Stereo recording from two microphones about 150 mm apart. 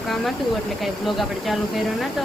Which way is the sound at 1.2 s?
Centre (ahead or behind).